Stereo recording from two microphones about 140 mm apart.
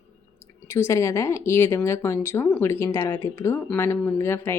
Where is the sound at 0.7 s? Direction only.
20° left (ahead or behind).